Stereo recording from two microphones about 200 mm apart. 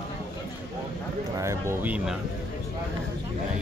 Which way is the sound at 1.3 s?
15° right (ahead or behind).